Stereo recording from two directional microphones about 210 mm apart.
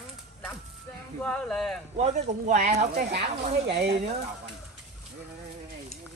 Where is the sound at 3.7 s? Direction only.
50° right (ahead or behind).